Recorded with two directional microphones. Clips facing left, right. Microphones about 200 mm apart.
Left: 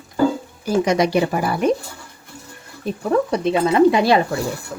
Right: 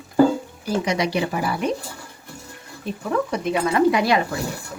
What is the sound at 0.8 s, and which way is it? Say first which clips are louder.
Speech: left 7 dB; 45° left (ahead or behind).